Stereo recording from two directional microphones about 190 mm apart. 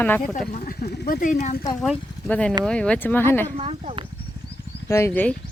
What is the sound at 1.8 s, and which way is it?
Speech, centre (ahead or behind).